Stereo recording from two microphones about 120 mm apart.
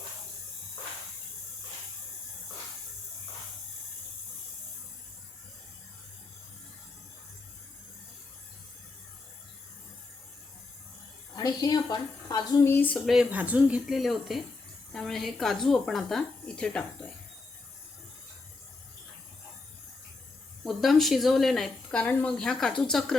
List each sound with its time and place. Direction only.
11.3 s a woman's voice: 30° left (ahead or behind)
12.7 s speech: 15° left (ahead or behind)
13.3 s a woman's voice: 10° right (ahead or behind); by 16.8 s 5° left (ahead or behind)
20.7 s a woman's voice: centre (ahead or behind)